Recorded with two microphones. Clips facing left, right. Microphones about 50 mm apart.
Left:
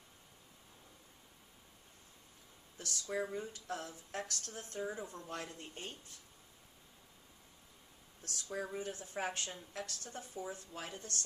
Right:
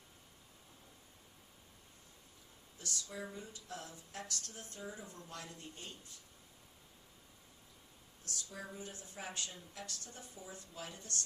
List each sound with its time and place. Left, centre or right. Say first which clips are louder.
2.7 s speech: left 6 dB; left
8.3 s speech: left 6 dB; left